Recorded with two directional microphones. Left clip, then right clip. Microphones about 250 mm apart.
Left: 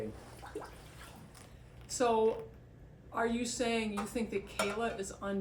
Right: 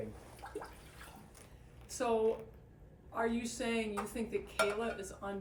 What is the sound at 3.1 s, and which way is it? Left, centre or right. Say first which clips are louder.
Speech: left 2 dB; left.